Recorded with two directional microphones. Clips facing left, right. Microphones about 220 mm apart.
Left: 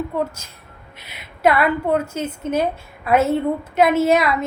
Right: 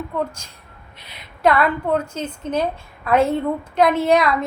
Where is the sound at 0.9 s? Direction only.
5° left (ahead or behind).